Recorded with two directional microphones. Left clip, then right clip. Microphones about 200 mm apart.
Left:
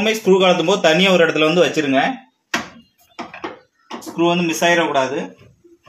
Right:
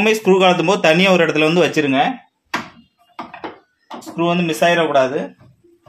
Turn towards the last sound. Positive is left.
turn(degrees=-40)  # may be behind; listen again after turning